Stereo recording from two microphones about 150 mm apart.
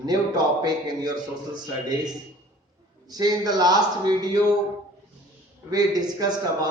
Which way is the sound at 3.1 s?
25° right (ahead or behind).